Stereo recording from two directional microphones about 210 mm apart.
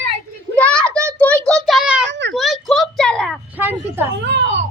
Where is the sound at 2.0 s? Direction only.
55° right (ahead or behind).